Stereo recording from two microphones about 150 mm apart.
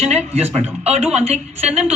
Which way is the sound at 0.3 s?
45° right (ahead or behind).